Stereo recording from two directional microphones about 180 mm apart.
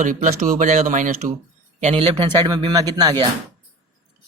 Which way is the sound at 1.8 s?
35° right (ahead or behind).